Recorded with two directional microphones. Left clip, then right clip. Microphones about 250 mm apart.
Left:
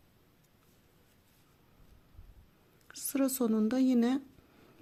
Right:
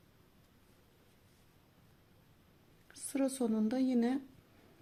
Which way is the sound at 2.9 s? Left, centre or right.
Left.